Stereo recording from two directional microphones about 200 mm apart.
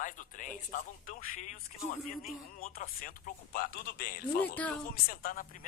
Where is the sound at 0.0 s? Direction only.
40° left (ahead or behind).